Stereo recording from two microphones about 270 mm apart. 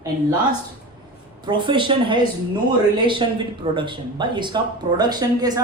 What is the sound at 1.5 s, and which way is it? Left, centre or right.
Speech, centre.